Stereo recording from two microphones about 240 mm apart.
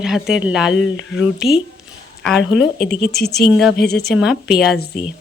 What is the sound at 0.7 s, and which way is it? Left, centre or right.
Speech, left.